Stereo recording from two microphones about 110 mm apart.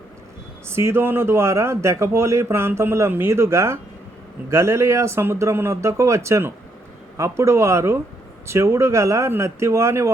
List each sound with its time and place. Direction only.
0.7 s speech: 25° right (ahead or behind)